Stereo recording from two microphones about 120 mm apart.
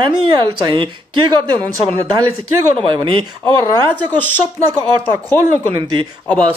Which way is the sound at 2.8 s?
45° right (ahead or behind).